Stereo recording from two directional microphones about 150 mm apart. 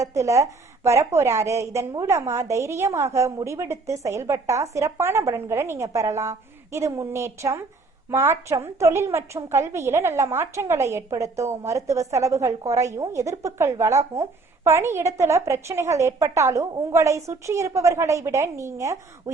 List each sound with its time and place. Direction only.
0.0 s a woman's voice: 20° right (ahead or behind)